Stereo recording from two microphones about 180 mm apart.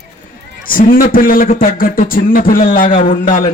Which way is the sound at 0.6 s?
50° left (ahead or behind).